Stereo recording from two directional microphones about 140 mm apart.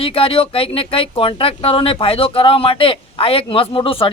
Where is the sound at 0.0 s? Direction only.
40° left (ahead or behind).